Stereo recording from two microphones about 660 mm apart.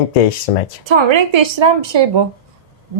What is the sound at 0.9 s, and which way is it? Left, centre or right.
A woman's voice, right.